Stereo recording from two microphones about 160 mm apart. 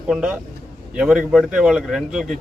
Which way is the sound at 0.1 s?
5° right (ahead or behind).